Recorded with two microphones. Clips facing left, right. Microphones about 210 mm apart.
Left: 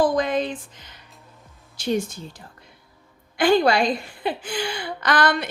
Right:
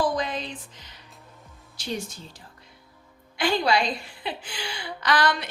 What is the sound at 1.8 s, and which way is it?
Music, 50° left (ahead or behind).